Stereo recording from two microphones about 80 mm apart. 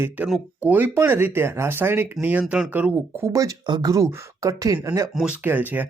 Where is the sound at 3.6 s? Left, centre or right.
Right.